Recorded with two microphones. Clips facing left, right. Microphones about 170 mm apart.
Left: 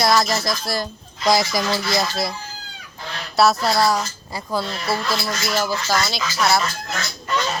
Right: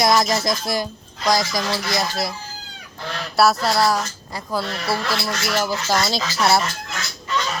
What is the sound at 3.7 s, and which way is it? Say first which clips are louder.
A woman's voice: even; centre (ahead or behind).